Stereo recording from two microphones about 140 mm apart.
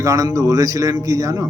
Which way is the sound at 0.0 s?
25° right (ahead or behind).